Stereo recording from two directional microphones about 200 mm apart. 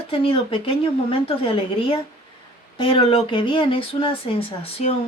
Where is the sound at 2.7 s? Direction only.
25° left (ahead or behind).